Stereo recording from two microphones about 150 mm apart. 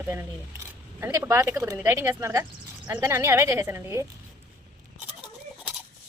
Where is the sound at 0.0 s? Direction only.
15° right (ahead or behind).